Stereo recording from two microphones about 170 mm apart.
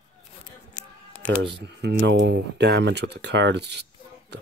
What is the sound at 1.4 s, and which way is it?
Speech, 85° right.